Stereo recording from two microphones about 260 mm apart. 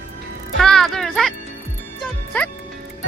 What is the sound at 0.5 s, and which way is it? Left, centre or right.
Music, centre.